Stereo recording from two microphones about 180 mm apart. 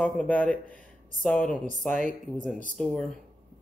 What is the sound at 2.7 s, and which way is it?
Speech, 5° left (ahead or behind).